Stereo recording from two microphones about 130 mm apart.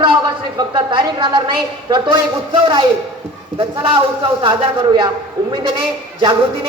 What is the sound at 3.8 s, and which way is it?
A man's voice, 45° right (ahead or behind).